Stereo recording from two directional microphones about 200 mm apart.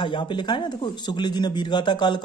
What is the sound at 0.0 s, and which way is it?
A man's voice, 25° left (ahead or behind).